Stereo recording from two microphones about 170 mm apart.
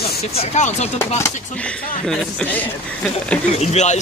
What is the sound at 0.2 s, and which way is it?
Speech, 40° left (ahead or behind).